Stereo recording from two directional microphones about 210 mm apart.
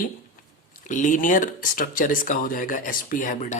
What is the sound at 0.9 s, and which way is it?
Speech, 35° left (ahead or behind).